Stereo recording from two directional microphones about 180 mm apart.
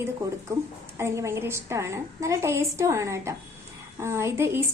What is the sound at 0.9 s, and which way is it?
A woman's voice, 15° right (ahead or behind).